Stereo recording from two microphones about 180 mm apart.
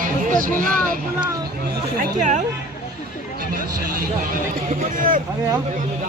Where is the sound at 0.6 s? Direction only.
50° right (ahead or behind).